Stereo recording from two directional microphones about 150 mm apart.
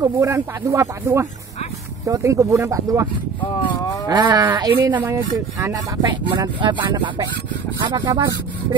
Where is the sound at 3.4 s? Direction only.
30° left (ahead or behind).